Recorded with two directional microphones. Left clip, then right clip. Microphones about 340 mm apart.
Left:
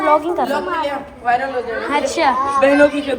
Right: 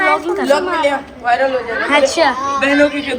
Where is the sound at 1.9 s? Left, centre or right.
Centre.